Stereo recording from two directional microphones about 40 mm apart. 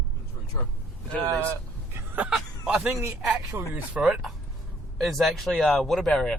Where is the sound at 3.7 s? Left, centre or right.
Right.